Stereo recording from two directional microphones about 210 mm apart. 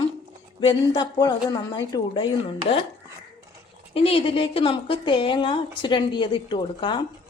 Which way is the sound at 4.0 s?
25° left (ahead or behind).